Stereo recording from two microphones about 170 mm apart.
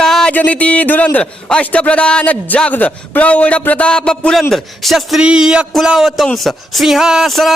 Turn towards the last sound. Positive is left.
turn(degrees=0)  # may be behind; listen again after turning